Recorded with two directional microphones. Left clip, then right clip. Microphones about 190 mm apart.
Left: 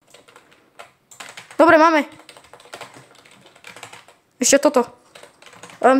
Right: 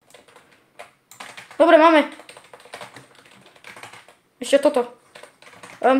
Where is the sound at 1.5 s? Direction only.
35° left (ahead or behind).